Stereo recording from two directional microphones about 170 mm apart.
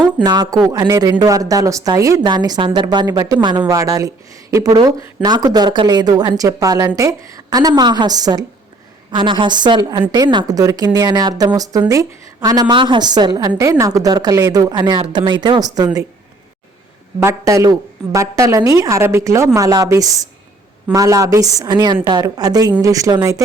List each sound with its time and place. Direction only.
0.2 s speech: 25° right (ahead or behind)
17.2 s a woman's voice: 20° right (ahead or behind)